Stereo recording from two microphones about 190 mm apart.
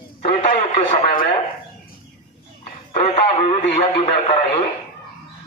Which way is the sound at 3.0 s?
30° left (ahead or behind).